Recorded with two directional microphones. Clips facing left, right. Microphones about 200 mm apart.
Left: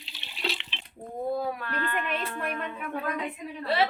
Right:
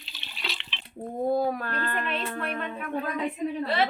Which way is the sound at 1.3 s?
40° right (ahead or behind).